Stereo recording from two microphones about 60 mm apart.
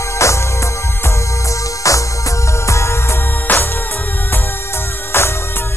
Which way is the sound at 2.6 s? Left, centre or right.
Left.